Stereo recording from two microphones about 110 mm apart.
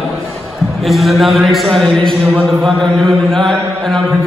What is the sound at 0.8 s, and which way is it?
Chant, centre (ahead or behind).